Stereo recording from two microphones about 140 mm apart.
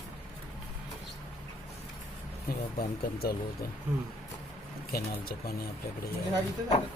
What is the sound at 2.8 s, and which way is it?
Speech, 90° left.